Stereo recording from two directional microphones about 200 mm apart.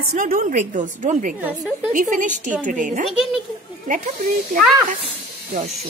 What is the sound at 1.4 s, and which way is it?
Speech, 5° right (ahead or behind).